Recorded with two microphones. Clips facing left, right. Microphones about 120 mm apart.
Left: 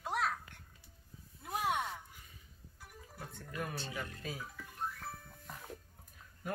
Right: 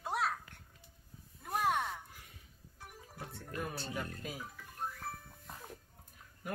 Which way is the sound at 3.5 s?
45° right (ahead or behind).